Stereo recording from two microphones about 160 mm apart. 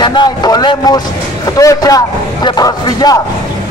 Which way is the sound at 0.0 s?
25° left (ahead or behind).